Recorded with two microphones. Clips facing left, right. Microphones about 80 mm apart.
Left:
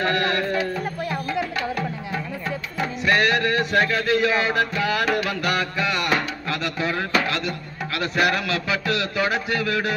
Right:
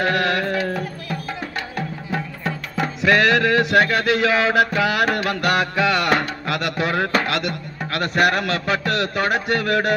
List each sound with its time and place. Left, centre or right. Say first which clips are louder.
0.0 s music: right 2 dB; right
2.1 s music: right 5 dB; right
5.3 s music: right 4 dB; right
7.2 s a man's voice: right 3 dB; right